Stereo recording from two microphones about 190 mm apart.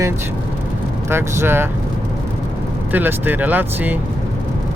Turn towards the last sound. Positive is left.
turn(degrees=-10)  # may be behind; listen again after turning